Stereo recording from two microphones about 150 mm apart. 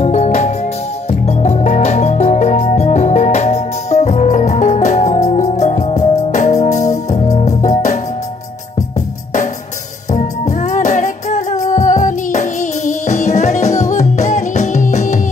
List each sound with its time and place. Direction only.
0.0 s music: 50° left (ahead or behind)
10.1 s music: 50° left (ahead or behind)